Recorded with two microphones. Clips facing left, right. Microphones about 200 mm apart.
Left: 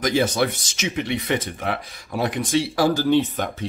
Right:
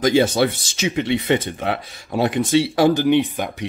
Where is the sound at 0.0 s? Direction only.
25° right (ahead or behind).